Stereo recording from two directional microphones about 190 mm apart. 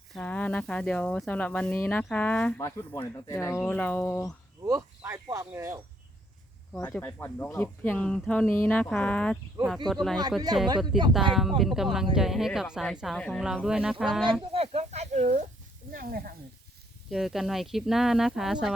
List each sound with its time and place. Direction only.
0.1 s speech: 5° left (ahead or behind)
4.6 s speech: 15° right (ahead or behind)
6.7 s speech: 5° left (ahead or behind)
10.8 s speech: 25° right (ahead or behind)
11.1 s speech: centre (ahead or behind)
14.5 s a sound: 35° right (ahead or behind)
15.9 s speech: 50° right (ahead or behind)
17.1 s speech: centre (ahead or behind)